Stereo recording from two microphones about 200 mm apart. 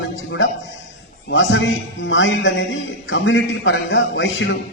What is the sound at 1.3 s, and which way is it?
A man's voice, 70° left (ahead or behind).